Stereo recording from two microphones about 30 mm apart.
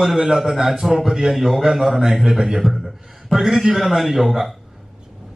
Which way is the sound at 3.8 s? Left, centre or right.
Centre.